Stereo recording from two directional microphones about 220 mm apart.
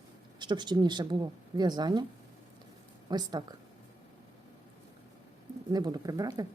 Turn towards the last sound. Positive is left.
turn(degrees=-15)  # may be behind; listen again after turning